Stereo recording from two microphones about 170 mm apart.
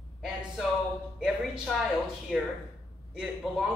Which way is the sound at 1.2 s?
5° right (ahead or behind).